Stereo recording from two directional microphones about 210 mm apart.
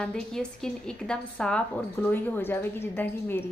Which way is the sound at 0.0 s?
5° left (ahead or behind).